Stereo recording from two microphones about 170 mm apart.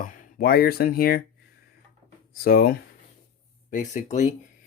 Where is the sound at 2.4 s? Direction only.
60° left (ahead or behind).